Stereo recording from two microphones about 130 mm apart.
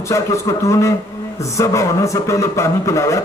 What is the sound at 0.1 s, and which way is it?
A man's voice, 25° left (ahead or behind).